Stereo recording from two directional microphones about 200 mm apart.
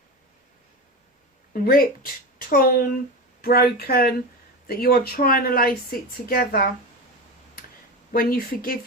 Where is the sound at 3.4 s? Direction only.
50° left (ahead or behind).